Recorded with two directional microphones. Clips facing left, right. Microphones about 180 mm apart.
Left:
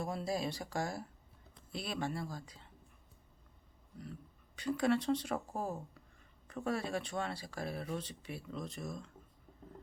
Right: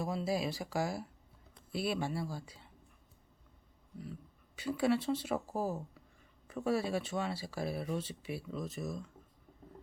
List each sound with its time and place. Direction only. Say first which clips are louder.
0.0 s speech: right 2 dB; 5° right (ahead or behind)
3.9 s speech: right 2 dB; centre (ahead or behind)